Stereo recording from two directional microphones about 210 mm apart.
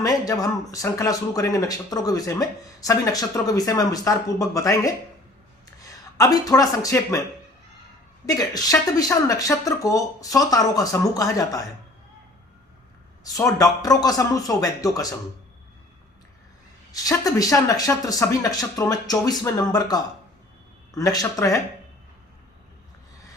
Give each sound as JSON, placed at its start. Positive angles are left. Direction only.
{"t": 0.0, "sound": "speech", "side_deg": 15}
{"t": 8.3, "sound": "speech", "side_deg": 15}
{"t": 13.2, "sound": "speech", "side_deg": 15}
{"t": 16.9, "sound": "speech", "side_deg": 15}